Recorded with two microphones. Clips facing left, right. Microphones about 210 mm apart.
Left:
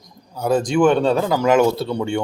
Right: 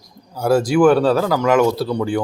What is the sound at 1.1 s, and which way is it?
Speech, 20° left (ahead or behind).